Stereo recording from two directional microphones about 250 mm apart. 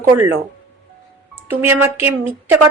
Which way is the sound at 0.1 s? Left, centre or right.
Right.